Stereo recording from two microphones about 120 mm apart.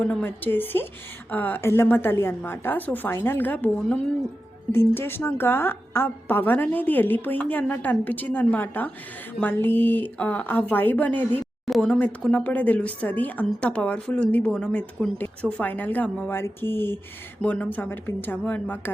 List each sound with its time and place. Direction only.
0.0 s a woman's voice: 15° left (ahead or behind)
11.6 s speech: centre (ahead or behind)
11.9 s a woman's voice: 10° left (ahead or behind)